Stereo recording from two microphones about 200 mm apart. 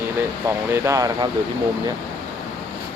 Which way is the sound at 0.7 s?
15° right (ahead or behind).